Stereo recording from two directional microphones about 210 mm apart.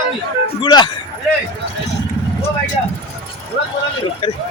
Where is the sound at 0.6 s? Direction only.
20° left (ahead or behind).